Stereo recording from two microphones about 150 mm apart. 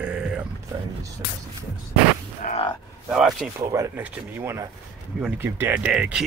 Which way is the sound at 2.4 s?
60° left (ahead or behind).